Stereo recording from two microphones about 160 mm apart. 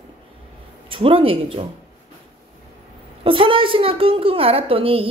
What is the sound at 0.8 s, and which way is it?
Speech, 35° right (ahead or behind).